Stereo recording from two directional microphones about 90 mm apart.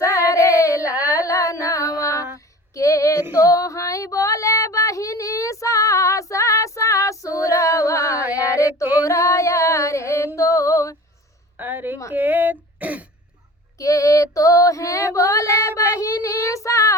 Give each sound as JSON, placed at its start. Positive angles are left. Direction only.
{"t": 0.0, "sound": "a sound", "side_deg": 35}
{"t": 0.9, "sound": "a sound", "side_deg": -20}
{"t": 1.1, "sound": "music", "side_deg": 35}
{"t": 2.7, "sound": "female singing", "side_deg": 35}
{"t": 9.0, "sound": "singing", "side_deg": 35}
{"t": 10.3, "sound": "female singing", "side_deg": 35}
{"t": 11.5, "sound": "a sound", "side_deg": -20}
{"t": 12.1, "sound": "throat clearing", "side_deg": -20}
{"t": 13.7, "sound": "female singing", "side_deg": 35}